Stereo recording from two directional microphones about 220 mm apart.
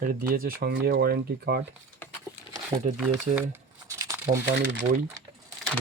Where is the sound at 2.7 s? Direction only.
25° right (ahead or behind).